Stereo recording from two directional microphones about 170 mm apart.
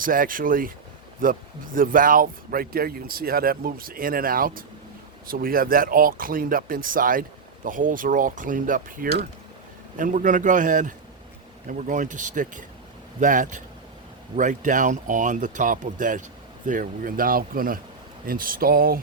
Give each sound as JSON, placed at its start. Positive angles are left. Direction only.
{"t": 0.0, "sound": "speech", "side_deg": -55}